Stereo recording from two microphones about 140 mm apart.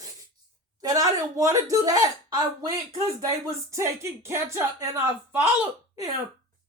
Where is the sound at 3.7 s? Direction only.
20° right (ahead or behind).